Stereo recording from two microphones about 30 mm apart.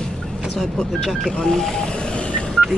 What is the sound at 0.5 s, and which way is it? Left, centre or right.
Speech, centre.